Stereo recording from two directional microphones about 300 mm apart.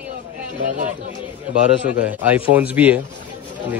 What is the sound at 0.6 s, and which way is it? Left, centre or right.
Speech, right.